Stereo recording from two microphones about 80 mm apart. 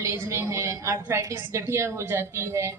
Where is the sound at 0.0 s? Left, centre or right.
Right.